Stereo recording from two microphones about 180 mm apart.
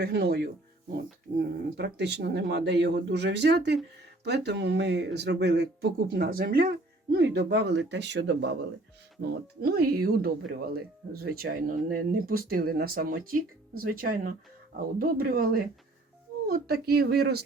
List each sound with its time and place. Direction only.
0.0 s speech: 65° right (ahead or behind)
9.6 s speech: 60° right (ahead or behind)